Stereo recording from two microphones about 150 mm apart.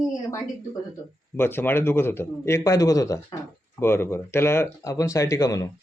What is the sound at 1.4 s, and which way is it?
Speech, 15° left (ahead or behind).